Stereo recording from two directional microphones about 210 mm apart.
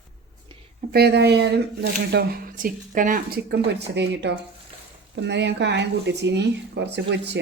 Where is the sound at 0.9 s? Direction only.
50° right (ahead or behind).